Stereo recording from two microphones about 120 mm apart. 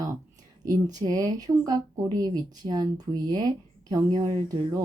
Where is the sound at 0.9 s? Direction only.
30° right (ahead or behind).